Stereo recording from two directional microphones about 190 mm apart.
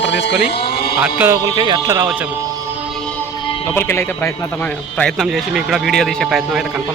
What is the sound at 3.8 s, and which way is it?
A man's voice, 10° left (ahead or behind).